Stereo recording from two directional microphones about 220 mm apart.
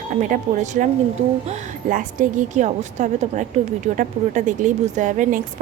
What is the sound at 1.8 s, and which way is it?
A woman's voice, 35° right (ahead or behind).